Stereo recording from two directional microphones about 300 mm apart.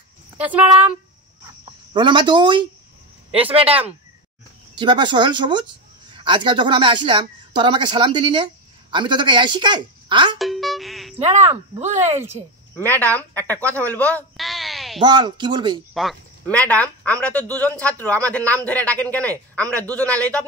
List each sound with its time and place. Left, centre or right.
0.4 s a man's voice: centre
2.0 s speech: centre
4.7 s speech: centre
10.4 s music: centre
11.1 s speech: right
12.7 s a man's voice: centre
14.1 s a sound: centre
15.0 s speech: centre
15.9 s a man's voice: centre